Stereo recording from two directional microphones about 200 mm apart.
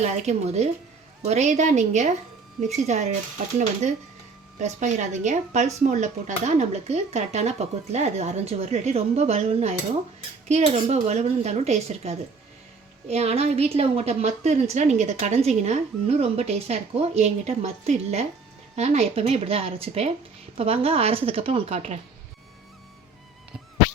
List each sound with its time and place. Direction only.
0.0 s a woman's voice: 35° right (ahead or behind)
4.5 s a woman's voice: 35° right (ahead or behind)